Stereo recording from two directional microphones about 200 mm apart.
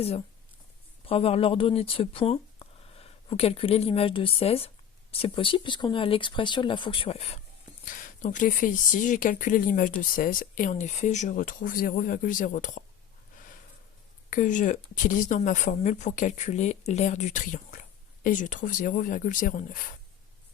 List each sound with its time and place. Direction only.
1.0 s speech: 30° left (ahead or behind)
7.9 s speech: 40° left (ahead or behind)
13.3 s a sound: 40° left (ahead or behind)
14.3 s speech: 40° left (ahead or behind)